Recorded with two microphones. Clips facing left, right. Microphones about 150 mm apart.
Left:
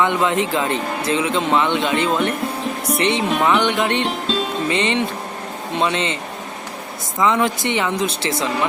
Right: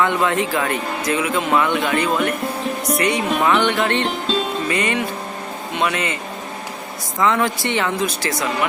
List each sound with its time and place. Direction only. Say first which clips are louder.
0.0 s speech: even; 20° left (ahead or behind)
3.2 s speech: even; centre (ahead or behind)
3.6 s speech: even; 20° left (ahead or behind)
4.0 s music: even; centre (ahead or behind)
4.7 s speech: left 2 dB; 25° left (ahead or behind)
7.2 s speech: left 1 dB; 20° left (ahead or behind)